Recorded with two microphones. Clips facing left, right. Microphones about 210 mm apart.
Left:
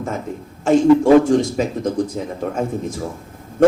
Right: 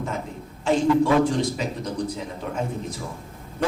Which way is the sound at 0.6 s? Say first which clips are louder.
Left 7 dB; 45° left (ahead or behind).